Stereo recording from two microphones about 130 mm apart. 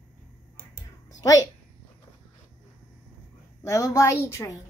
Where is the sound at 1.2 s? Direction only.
25° left (ahead or behind).